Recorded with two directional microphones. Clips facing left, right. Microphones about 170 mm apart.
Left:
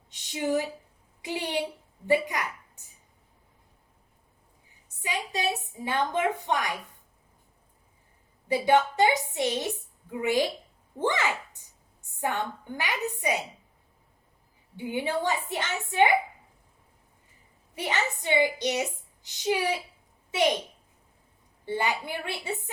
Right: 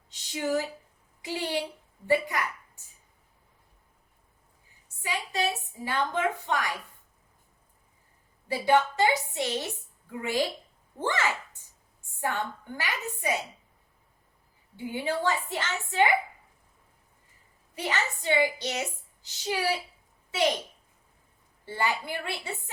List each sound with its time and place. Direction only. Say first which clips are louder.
0.1 s a woman's voice: left 1 dB; 20° left (ahead or behind)
5.0 s a woman's voice: even; 20° left (ahead or behind)
8.4 s a woman's voice: left 1 dB; 20° left (ahead or behind)
14.8 s a woman's voice: left 1 dB; 20° left (ahead or behind)
17.7 s a woman's voice: left 1 dB; 20° left (ahead or behind)
21.6 s a woman's voice: left 1 dB; 20° left (ahead or behind)